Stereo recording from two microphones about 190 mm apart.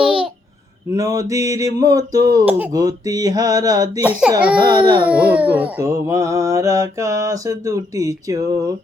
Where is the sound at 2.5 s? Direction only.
10° right (ahead or behind).